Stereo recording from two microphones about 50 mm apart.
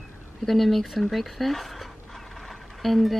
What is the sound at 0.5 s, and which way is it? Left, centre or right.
Speech, centre.